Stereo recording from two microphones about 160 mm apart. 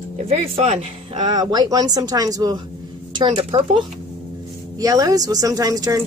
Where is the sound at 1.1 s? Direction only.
30° right (ahead or behind).